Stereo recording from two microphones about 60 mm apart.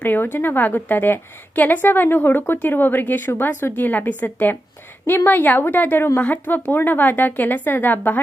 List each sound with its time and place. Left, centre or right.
0.0 s a woman's voice: left